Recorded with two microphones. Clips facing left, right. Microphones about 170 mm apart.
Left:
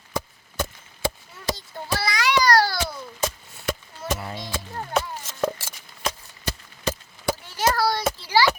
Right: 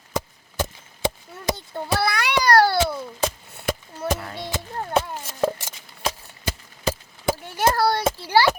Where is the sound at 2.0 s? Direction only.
60° right (ahead or behind).